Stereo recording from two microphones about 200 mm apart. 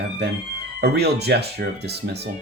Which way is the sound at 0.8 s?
55° right (ahead or behind).